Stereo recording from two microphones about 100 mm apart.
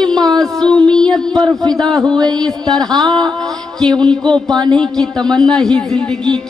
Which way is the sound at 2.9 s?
45° right (ahead or behind).